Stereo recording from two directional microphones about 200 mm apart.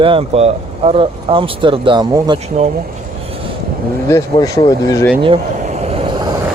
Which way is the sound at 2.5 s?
35° right (ahead or behind).